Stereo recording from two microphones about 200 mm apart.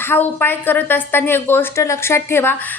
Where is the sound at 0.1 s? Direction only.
10° left (ahead or behind).